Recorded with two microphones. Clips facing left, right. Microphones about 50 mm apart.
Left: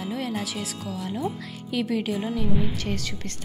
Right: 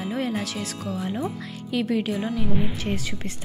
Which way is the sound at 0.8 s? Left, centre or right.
Centre.